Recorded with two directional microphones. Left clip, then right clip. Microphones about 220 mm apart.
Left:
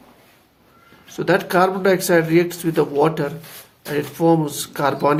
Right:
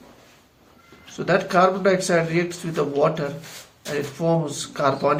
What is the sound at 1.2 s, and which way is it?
Speech, 50° left (ahead or behind).